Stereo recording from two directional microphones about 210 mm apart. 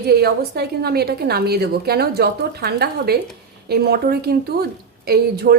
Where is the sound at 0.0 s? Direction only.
50° right (ahead or behind).